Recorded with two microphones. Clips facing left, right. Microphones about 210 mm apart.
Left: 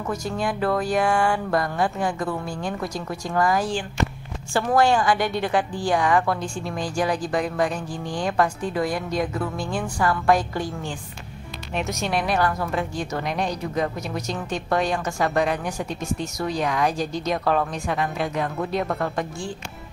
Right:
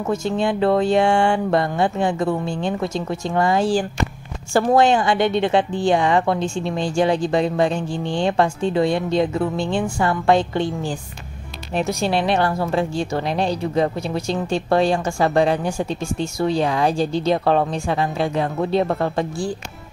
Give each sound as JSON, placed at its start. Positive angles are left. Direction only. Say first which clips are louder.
{"t": 0.0, "sound": "speech", "louder": "right 6 dB", "side_deg": -25}
{"t": 4.7, "sound": "speech", "louder": "right 1 dB", "side_deg": -20}